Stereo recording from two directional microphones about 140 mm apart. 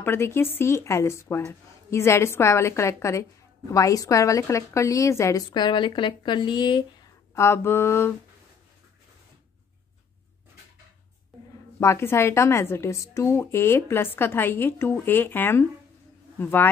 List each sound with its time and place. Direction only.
0.0 s a woman's voice: 15° left (ahead or behind); by 6.8 s 35° left (ahead or behind)
7.3 s a woman's voice: 20° left (ahead or behind)
11.8 s a woman's voice: 20° left (ahead or behind)